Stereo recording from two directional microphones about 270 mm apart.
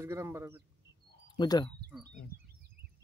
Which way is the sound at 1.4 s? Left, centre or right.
Centre.